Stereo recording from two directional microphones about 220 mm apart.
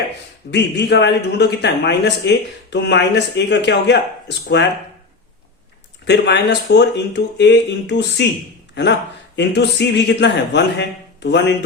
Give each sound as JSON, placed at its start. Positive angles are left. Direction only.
{"t": 0.5, "sound": "a man's voice", "side_deg": 50}
{"t": 6.1, "sound": "a man's voice", "side_deg": 50}